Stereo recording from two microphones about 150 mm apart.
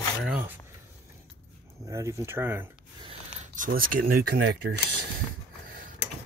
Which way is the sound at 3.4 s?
60° right (ahead or behind).